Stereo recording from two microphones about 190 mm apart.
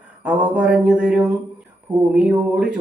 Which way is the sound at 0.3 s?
5° right (ahead or behind).